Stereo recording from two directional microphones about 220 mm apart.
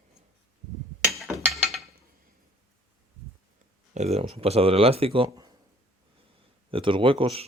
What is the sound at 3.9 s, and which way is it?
Speech, 30° right (ahead or behind).